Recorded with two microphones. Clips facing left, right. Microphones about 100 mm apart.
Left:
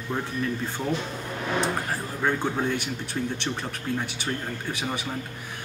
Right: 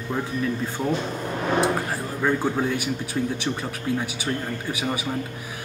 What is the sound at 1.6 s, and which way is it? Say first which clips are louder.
Speech: right 4 dB; 5° right (ahead or behind).